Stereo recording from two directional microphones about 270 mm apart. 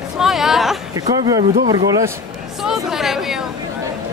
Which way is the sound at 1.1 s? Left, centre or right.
Centre.